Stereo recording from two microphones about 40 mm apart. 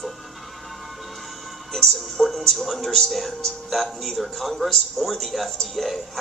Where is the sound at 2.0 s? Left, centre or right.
Centre.